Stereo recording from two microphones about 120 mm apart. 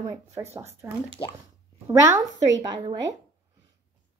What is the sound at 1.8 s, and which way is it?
Speech, 20° right (ahead or behind).